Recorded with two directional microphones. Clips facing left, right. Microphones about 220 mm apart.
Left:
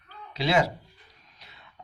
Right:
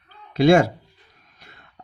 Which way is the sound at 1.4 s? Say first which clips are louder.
Right 4 dB; 50° right (ahead or behind).